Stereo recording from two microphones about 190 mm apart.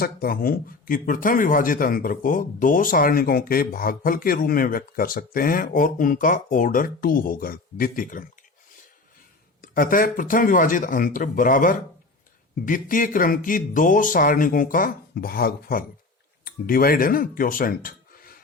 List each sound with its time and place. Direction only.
0.0 s speech: 50° left (ahead or behind)
9.6 s speech: 45° left (ahead or behind)